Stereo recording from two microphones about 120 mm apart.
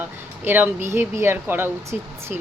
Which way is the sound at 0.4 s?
15° right (ahead or behind).